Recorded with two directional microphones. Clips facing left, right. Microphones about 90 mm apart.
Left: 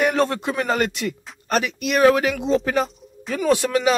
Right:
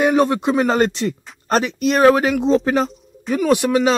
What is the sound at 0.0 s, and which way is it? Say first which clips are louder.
A man's voice: right 4 dB; 15° right (ahead or behind).